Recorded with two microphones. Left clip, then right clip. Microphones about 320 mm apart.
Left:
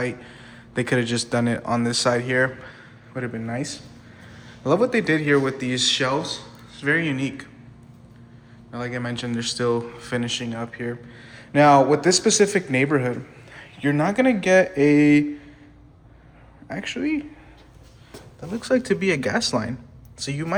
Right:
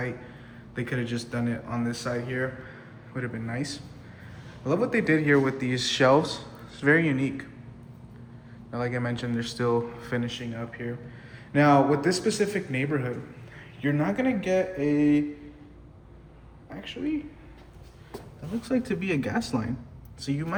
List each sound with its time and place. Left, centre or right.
0.7 s a man's voice: centre
8.7 s a man's voice: centre
14.8 s mantra: left
18.6 s a man's voice: centre